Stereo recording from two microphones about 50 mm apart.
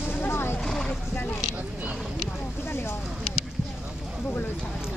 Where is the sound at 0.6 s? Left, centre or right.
Centre.